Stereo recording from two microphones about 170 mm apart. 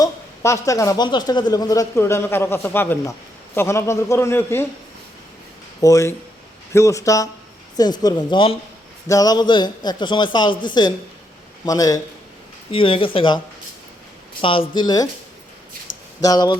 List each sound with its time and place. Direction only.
0.0 s a woman's voice: 20° left (ahead or behind)
5.8 s a man's voice: 20° left (ahead or behind)
14.4 s a man's voice: 30° left (ahead or behind)
16.2 s a man's voice: 25° left (ahead or behind)